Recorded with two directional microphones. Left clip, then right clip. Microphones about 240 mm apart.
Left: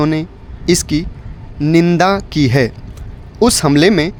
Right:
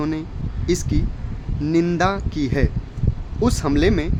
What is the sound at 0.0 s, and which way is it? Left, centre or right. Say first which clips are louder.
Speech: left 9 dB; left.